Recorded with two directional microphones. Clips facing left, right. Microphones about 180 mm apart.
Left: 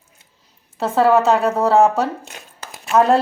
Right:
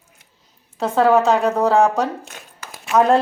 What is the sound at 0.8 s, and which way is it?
A woman's voice, 5° left (ahead or behind).